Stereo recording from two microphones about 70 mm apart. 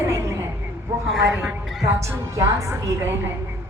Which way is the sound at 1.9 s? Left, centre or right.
Right.